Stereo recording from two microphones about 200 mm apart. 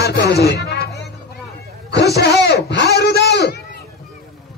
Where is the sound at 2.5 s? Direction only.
55° left (ahead or behind).